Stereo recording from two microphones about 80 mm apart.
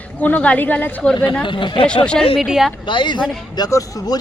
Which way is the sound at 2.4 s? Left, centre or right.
Centre.